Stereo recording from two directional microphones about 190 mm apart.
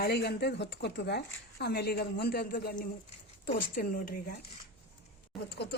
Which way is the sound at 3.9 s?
45° left (ahead or behind).